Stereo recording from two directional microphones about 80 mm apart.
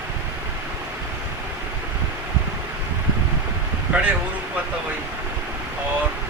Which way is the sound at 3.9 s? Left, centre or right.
Centre.